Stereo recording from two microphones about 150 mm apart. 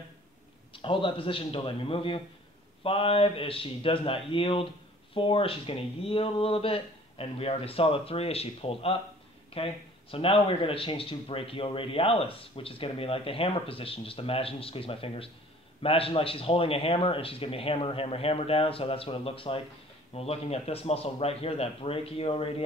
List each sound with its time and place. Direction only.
0.7 s speech: 35° left (ahead or behind)